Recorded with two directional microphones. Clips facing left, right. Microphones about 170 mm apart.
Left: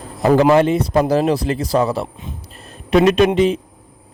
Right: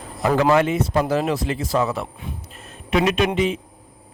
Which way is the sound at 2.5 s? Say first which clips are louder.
Left 6 dB; 35° left (ahead or behind).